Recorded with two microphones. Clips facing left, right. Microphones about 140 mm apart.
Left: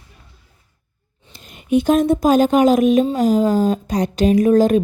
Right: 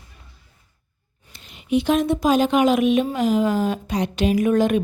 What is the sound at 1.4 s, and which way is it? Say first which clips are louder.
Speech: left 4 dB; 45° left (ahead or behind).